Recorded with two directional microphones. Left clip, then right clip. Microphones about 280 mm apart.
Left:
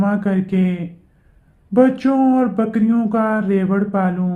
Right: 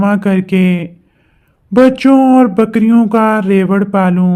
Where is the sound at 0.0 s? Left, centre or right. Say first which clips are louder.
Right 6 dB; right.